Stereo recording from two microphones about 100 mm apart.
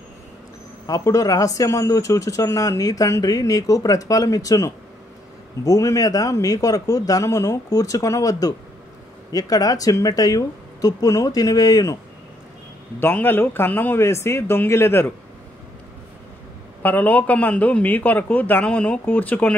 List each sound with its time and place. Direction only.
0.8 s speech: 35° left (ahead or behind)
13.0 s speech: 20° left (ahead or behind)
16.8 s a man's voice: 15° left (ahead or behind)